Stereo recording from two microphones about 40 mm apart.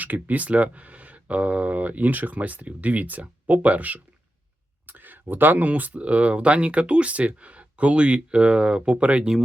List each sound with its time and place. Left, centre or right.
0.0 s speech: right
4.9 s speech: right